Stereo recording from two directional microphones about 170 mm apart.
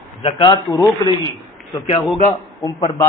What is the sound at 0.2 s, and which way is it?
A man's voice, 30° left (ahead or behind).